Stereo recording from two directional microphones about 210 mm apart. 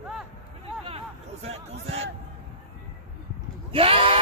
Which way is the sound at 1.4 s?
30° right (ahead or behind).